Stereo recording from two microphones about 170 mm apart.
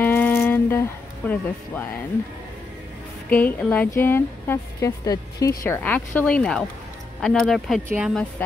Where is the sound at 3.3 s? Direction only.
10° left (ahead or behind); by 8.2 s 5° right (ahead or behind).